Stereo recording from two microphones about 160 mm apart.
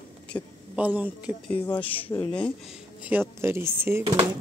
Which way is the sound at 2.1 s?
15° left (ahead or behind).